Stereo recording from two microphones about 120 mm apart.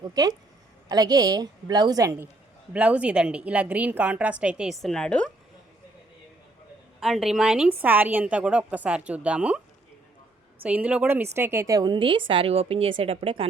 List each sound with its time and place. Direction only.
0.0 s a woman's voice: 35° right (ahead or behind)
2.7 s a woman's voice: 10° right (ahead or behind); by 5.3 s 10° left (ahead or behind)
7.0 s a woman's voice: 5° right (ahead or behind)
7.7 s a woman's voice: 15° right (ahead or behind)
10.6 s a woman's voice: 10° right (ahead or behind); by 13.5 s 50° right (ahead or behind)